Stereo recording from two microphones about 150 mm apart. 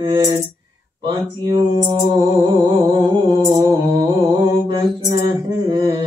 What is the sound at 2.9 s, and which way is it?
Mantra, 30° right (ahead or behind).